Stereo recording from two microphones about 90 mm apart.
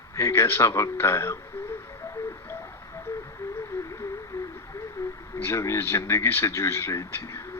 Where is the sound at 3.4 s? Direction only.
25° left (ahead or behind).